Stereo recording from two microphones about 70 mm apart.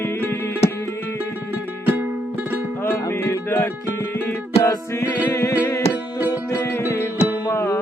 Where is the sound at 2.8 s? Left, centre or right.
Left.